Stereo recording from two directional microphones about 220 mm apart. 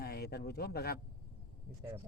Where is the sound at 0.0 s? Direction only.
45° left (ahead or behind).